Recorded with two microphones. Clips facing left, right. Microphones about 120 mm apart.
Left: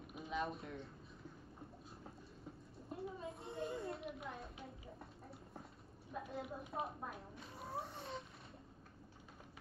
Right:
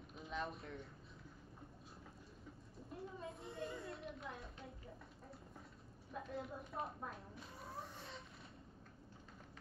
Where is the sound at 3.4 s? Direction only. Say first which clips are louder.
Left 5 dB; 25° left (ahead or behind).